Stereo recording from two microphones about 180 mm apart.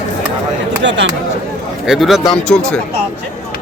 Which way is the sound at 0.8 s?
85° right.